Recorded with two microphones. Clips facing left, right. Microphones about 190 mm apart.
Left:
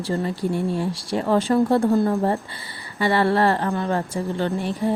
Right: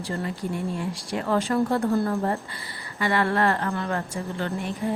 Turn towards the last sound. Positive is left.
turn(degrees=30)  # may be behind; listen again after turning